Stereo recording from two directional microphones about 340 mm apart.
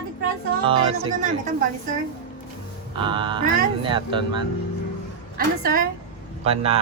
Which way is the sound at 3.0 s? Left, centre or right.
Centre.